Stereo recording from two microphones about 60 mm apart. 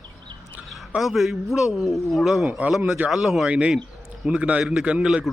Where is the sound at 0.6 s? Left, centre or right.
Centre.